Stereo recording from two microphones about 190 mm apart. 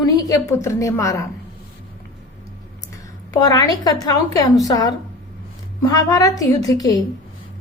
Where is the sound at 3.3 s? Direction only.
20° left (ahead or behind).